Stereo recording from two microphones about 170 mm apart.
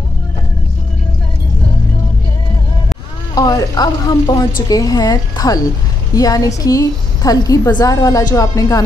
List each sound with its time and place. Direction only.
3.3 s a woman's voice: 20° left (ahead or behind)